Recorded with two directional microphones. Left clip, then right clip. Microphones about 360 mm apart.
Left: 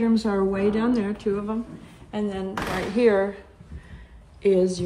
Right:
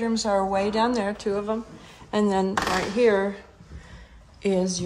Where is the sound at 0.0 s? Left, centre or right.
Centre.